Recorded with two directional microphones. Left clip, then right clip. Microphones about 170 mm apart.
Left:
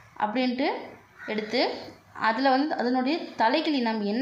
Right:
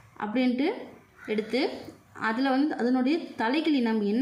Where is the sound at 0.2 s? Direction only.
20° right (ahead or behind).